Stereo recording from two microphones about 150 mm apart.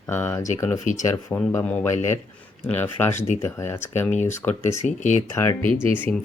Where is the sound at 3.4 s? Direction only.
15° left (ahead or behind).